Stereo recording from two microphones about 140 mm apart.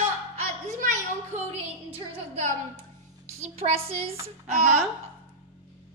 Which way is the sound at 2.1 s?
55° right (ahead or behind).